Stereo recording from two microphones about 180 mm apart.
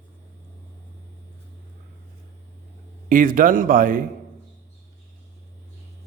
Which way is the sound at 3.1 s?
50° right (ahead or behind).